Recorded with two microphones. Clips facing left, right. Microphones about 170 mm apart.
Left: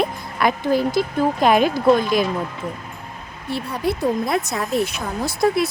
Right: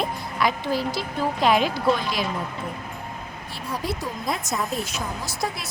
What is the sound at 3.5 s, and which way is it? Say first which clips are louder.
Speech: left 7 dB; 60° left (ahead or behind).